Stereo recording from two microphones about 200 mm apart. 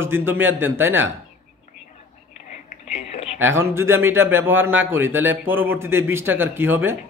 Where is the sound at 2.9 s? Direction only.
35° left (ahead or behind).